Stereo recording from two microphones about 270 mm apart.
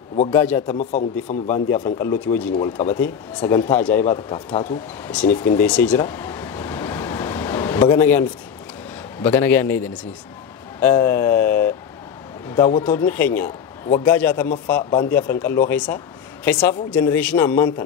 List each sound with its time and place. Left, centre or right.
0.3 s speech: centre
0.7 s a man's voice: left
1.5 s a man's voice: centre
10.8 s a sound: centre
12.4 s a man's voice: centre